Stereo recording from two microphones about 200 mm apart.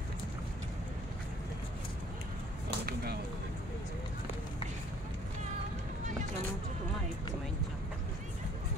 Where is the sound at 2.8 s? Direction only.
50° right (ahead or behind).